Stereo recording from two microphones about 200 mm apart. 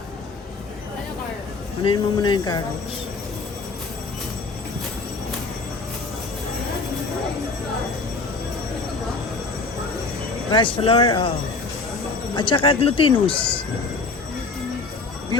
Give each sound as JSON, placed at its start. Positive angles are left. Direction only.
{"t": 1.8, "sound": "speech", "side_deg": 25}
{"t": 10.5, "sound": "speech", "side_deg": 25}
{"t": 12.4, "sound": "speech", "side_deg": 25}